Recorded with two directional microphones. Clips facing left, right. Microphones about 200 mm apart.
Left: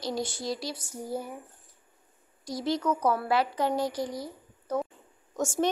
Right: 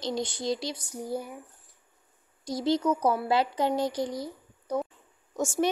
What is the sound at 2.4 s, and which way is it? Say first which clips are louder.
A child's voice: right 3 dB; 25° right (ahead or behind).